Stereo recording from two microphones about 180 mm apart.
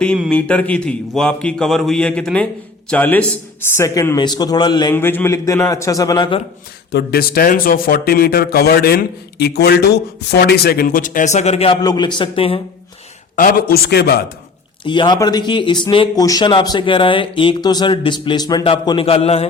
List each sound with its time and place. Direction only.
0.0 s a man's voice: 5° left (ahead or behind); by 4.9 s 25° left (ahead or behind)
4.9 s a man's voice: 10° left (ahead or behind)
6.9 s speech: 60° left (ahead or behind); by 11.8 s 35° left (ahead or behind)
11.8 s speech: 25° left (ahead or behind)
13.3 s speech: 50° left (ahead or behind)
14.8 s speech: 25° left (ahead or behind)